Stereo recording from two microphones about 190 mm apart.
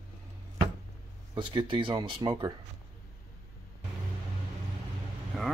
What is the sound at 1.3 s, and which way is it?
Speech, 25° right (ahead or behind).